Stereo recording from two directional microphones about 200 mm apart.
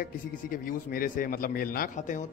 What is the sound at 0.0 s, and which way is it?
Speech, 45° left (ahead or behind).